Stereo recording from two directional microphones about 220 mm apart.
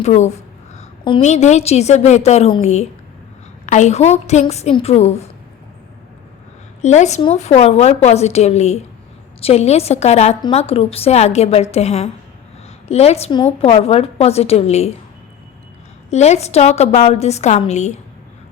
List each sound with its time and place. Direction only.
0.0 s a woman's voice: 30° left (ahead or behind)
6.8 s a woman's voice: 30° left (ahead or behind)
16.1 s a woman's voice: 30° left (ahead or behind)